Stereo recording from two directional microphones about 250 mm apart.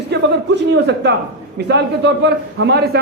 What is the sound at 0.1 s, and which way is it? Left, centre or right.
A man's voice, right.